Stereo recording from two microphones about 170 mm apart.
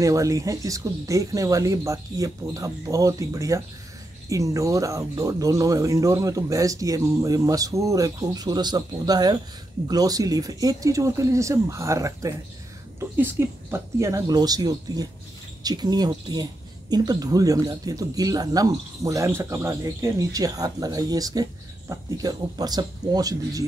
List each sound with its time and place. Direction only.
0.0 s speech: 20° right (ahead or behind)